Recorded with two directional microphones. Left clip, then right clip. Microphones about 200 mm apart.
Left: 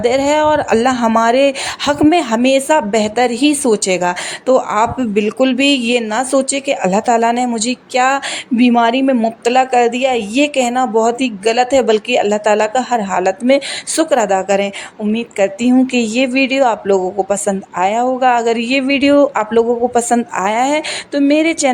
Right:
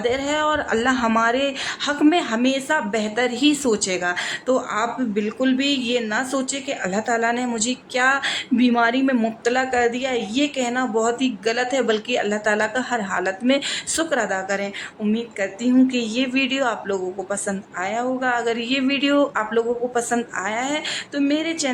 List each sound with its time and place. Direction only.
0.0 s a woman's voice: 35° left (ahead or behind)